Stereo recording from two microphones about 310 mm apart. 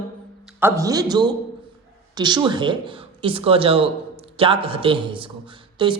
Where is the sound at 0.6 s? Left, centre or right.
Centre.